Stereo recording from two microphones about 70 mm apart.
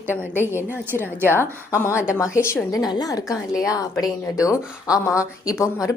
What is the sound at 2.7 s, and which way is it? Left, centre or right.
A woman's voice, left.